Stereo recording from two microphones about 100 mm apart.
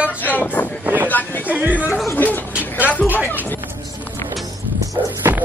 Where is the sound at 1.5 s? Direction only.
15° right (ahead or behind).